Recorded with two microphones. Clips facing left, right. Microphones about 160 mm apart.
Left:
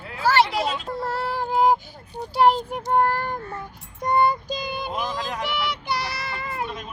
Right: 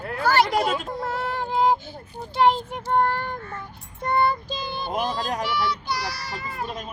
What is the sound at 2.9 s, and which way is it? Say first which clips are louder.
Child singing: left 1 dB; 10° left (ahead or behind).